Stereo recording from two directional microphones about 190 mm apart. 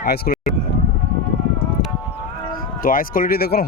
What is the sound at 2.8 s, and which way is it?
Speech, 50° left (ahead or behind).